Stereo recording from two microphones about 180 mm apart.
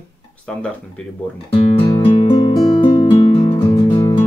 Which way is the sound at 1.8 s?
20° left (ahead or behind).